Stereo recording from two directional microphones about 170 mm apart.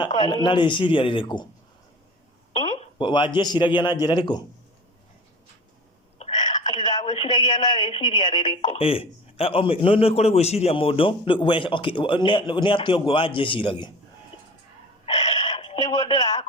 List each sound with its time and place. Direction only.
0.2 s a man's voice: 25° left (ahead or behind)
3.0 s a man's voice: 30° left (ahead or behind)
6.1 s a woman's voice: 40° left (ahead or behind)
15.0 s a sound: 40° left (ahead or behind)